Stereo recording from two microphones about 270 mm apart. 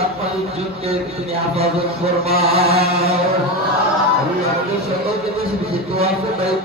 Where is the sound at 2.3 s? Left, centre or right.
Right.